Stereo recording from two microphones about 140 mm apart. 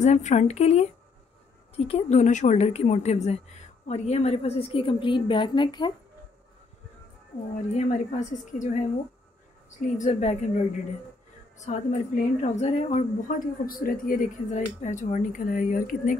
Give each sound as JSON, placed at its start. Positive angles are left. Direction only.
{"t": 0.0, "sound": "a woman's voice", "side_deg": 55}
{"t": 7.7, "sound": "speech", "side_deg": 55}
{"t": 13.3, "sound": "speech", "side_deg": 90}